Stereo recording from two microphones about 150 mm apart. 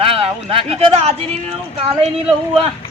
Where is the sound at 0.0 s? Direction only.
35° right (ahead or behind).